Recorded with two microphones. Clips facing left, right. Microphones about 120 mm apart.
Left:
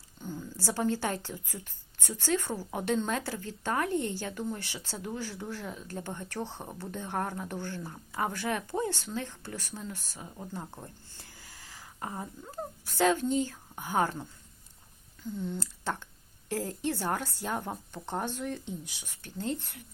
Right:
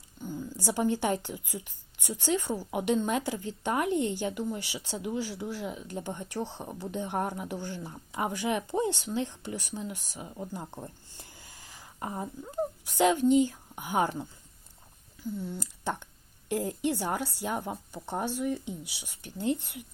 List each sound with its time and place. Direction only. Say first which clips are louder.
0.2 s a woman's voice: right 2 dB; 10° right (ahead or behind)
15.4 s a woman's voice: left 1 dB; 10° right (ahead or behind)